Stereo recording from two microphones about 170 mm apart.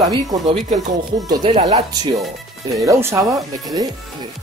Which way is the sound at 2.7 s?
20° right (ahead or behind).